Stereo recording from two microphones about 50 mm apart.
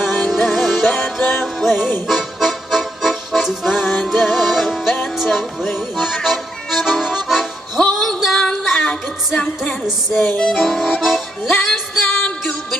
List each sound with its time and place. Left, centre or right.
0.0 s music: centre
1.4 s music: centre
7.9 s a sound: centre
8.7 s music: centre
9.8 s music: centre